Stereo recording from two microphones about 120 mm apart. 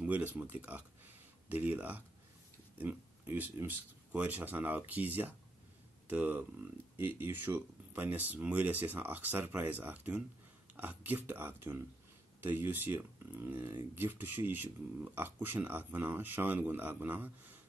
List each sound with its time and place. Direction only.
0.0 s speech: 15° right (ahead or behind)